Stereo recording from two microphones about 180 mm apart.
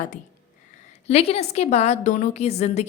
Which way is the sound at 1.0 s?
35° left (ahead or behind).